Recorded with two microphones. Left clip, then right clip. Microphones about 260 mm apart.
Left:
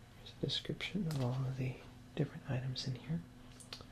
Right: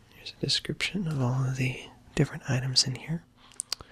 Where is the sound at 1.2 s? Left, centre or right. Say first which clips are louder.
Right 10 dB; right.